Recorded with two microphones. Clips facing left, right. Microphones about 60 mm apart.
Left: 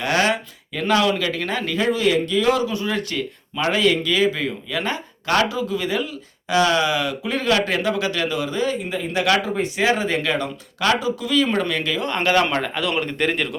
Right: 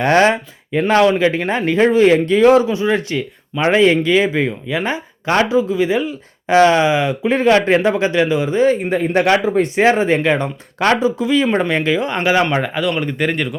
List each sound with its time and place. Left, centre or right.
0.0 s speech: right
2.6 s speech: right
12.8 s speech: centre